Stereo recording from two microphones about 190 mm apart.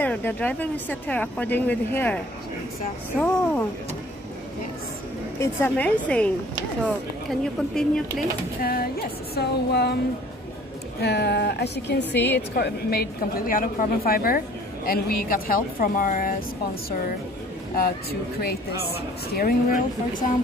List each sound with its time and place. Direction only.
0.0 s speech: 10° left (ahead or behind)
3.1 s speech: centre (ahead or behind)
5.4 s speech: 10° left (ahead or behind)
8.5 s a woman's voice: 50° left (ahead or behind)
11.0 s a woman's voice: 60° left (ahead or behind)
18.4 s a woman's voice: 55° left (ahead or behind)